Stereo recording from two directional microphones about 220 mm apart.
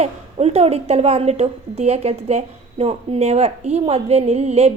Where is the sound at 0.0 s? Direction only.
30° right (ahead or behind).